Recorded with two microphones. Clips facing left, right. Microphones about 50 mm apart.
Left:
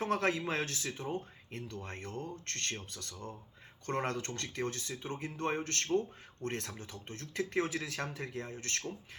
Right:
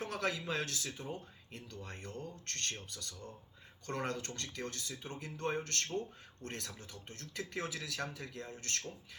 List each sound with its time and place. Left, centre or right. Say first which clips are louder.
0.0 s speech: left 5 dB; left